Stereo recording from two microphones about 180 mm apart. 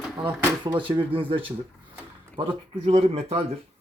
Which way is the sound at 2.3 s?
35° right (ahead or behind).